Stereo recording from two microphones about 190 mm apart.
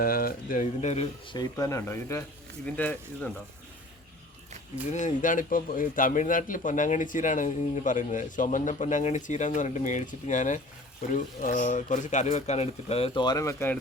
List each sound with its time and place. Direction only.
0.0 s speech: 50° left (ahead or behind)
1.3 s speech: 20° left (ahead or behind)
4.9 s a man's voice: 40° left (ahead or behind); by 13.7 s 15° left (ahead or behind)